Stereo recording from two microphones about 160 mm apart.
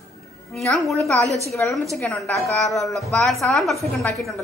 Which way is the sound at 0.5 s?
Centre (ahead or behind).